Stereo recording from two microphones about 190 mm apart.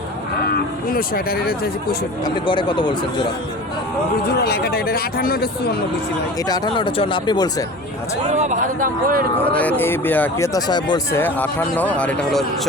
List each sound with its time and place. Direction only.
0.4 s speech: 50° left (ahead or behind)
2.2 s speech: 25° left (ahead or behind)
4.4 s speech: 55° left (ahead or behind)
6.5 s speech: 25° left (ahead or behind)
8.3 s speech: 40° right (ahead or behind)
9.4 s speech: 5° left (ahead or behind)